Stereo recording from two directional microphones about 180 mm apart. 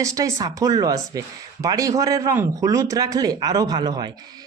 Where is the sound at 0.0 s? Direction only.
15° right (ahead or behind).